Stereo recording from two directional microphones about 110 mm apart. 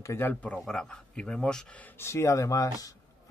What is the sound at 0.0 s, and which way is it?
Speech, 20° left (ahead or behind).